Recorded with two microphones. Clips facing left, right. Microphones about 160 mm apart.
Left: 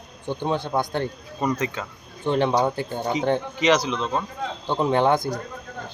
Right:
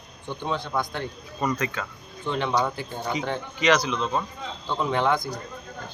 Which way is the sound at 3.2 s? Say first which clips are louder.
Left 3 dB; 25° left (ahead or behind).